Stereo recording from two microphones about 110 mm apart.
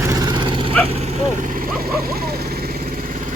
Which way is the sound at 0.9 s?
85° right.